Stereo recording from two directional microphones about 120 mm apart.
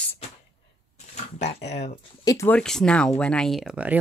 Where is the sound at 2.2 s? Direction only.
30° left (ahead or behind).